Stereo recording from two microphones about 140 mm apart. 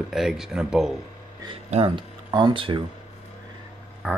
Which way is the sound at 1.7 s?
45° right (ahead or behind).